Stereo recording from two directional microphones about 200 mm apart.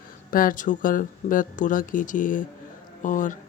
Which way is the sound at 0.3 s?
45° left (ahead or behind).